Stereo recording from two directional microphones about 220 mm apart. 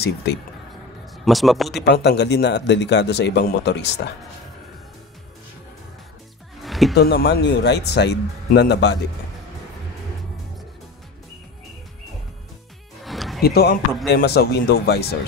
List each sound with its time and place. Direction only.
0.0 s a man's voice: 50° left (ahead or behind)
1.1 s speech: centre (ahead or behind)
1.9 s a man's voice: 50° left (ahead or behind)
6.6 s music: centre (ahead or behind)
7.0 s a man's voice: 45° left (ahead or behind)
13.0 s music: centre (ahead or behind)
13.4 s a man's voice: 45° left (ahead or behind)